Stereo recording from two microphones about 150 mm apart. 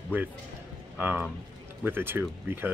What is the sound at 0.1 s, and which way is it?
Speech, 15° right (ahead or behind).